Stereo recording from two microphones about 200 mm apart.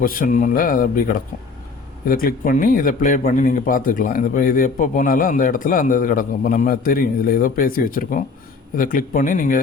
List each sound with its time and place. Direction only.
0.0 s a man's voice: 45° left (ahead or behind)